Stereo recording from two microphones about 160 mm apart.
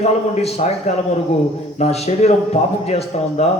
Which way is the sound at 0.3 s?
40° left (ahead or behind).